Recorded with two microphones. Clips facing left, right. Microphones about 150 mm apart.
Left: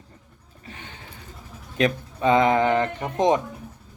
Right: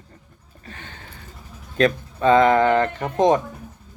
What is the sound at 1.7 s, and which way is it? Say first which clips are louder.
Speech: right 3 dB; 15° left (ahead or behind).